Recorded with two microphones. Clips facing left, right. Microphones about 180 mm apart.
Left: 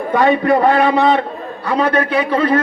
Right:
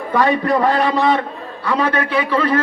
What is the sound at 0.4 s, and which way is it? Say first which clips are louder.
Speech: left 3 dB; 55° left (ahead or behind).